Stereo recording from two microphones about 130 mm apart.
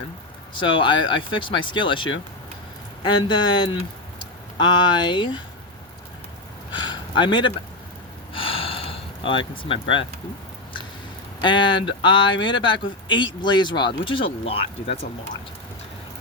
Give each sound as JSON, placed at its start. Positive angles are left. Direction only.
{"t": 0.5, "sound": "speech", "side_deg": 40}
{"t": 6.7, "sound": "a sound", "side_deg": 35}
{"t": 11.3, "sound": "speech", "side_deg": 35}